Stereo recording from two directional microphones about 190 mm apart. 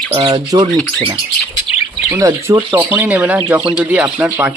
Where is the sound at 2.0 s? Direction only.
15° right (ahead or behind).